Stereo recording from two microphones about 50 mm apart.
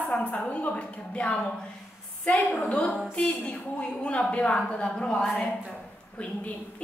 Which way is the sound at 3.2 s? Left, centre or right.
Left.